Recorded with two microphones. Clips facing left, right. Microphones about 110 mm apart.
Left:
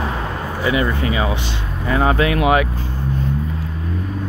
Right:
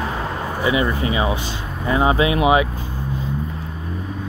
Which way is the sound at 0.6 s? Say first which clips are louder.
Left 1 dB; 20° right (ahead or behind).